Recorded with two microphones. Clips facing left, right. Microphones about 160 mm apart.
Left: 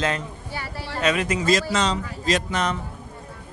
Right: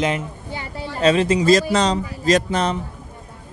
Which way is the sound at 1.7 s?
40° right (ahead or behind).